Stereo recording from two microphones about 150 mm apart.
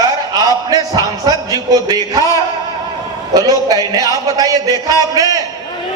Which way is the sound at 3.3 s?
25° right (ahead or behind).